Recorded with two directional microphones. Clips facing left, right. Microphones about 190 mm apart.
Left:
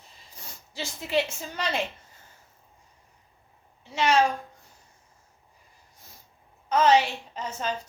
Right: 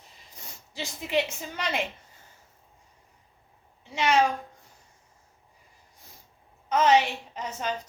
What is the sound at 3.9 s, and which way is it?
Speech, 15° right (ahead or behind).